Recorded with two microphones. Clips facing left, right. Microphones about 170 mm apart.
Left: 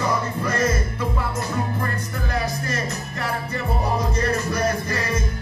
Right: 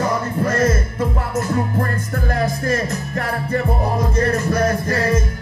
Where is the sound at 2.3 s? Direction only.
50° right (ahead or behind).